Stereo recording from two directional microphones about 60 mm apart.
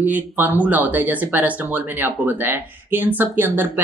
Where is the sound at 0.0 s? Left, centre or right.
Right.